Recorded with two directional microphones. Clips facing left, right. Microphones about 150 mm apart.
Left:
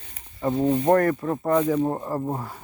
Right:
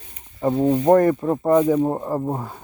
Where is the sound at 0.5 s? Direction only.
15° right (ahead or behind).